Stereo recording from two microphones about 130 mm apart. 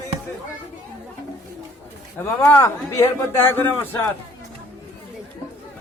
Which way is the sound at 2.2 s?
20° left (ahead or behind).